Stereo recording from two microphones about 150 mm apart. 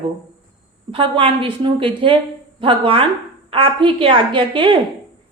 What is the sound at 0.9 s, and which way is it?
A woman's voice, 35° right (ahead or behind).